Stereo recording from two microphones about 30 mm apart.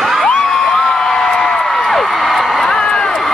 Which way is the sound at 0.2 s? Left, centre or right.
Left.